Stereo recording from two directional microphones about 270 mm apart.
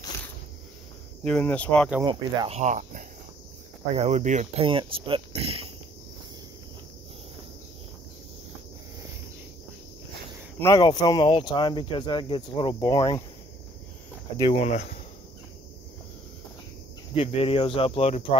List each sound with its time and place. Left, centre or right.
1.2 s speech: centre
2.0 s speech: centre
10.6 s speech: centre
14.3 s speech: centre
17.1 s speech: left